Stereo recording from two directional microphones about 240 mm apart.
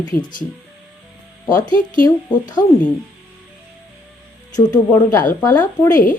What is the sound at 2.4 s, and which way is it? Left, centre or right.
Speech, centre.